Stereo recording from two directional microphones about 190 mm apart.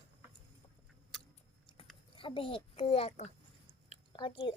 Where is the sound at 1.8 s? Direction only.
30° left (ahead or behind).